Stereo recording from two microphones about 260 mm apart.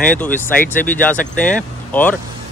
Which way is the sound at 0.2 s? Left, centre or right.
Centre.